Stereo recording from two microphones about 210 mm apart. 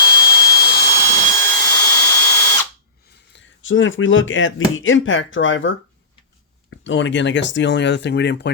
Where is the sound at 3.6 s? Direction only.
65° left (ahead or behind).